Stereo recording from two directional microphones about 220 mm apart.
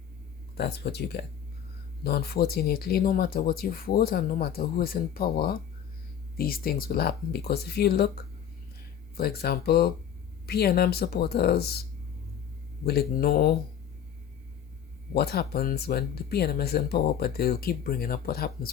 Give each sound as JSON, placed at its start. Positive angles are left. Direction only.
{"t": 0.5, "sound": "speech", "side_deg": 50}
{"t": 9.1, "sound": "speech", "side_deg": 45}
{"t": 15.1, "sound": "speech", "side_deg": 45}